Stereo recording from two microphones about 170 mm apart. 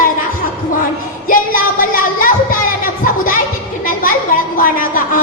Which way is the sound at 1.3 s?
55° left (ahead or behind).